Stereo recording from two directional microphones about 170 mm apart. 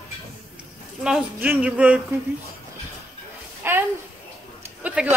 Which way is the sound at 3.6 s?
15° right (ahead or behind).